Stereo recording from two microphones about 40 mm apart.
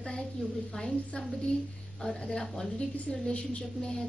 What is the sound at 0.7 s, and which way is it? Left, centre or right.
A woman's voice, left.